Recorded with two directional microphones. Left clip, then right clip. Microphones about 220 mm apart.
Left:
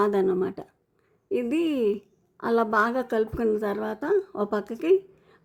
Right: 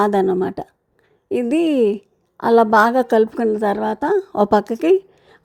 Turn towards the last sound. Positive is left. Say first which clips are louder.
# right 6 dB
turn(degrees=-30)  # may be behind; listen again after turning